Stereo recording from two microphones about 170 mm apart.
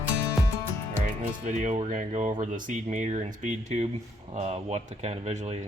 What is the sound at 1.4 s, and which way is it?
Speech, 45° right (ahead or behind).